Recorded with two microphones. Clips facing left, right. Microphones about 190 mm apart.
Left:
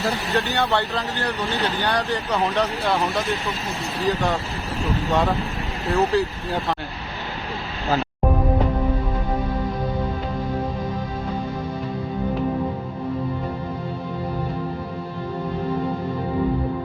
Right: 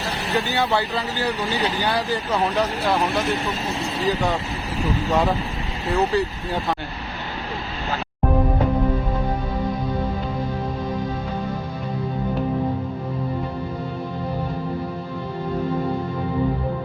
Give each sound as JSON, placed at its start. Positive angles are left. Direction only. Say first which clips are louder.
{"t": 0.3, "sound": "speech", "louder": "right 2 dB", "side_deg": -5}
{"t": 4.1, "sound": "speech", "louder": "left 1 dB", "side_deg": 0}